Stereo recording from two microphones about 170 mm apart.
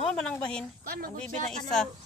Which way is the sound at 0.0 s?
5° left (ahead or behind).